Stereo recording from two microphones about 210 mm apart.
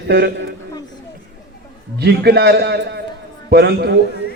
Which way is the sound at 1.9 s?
50° right (ahead or behind).